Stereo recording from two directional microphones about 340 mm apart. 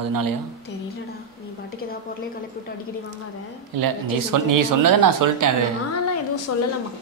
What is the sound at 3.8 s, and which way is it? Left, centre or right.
Speech, right.